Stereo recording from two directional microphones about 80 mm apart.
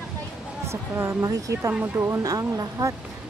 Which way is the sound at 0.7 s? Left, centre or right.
Right.